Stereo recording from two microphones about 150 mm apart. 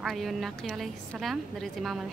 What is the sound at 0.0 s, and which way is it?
A woman's voice, centre (ahead or behind).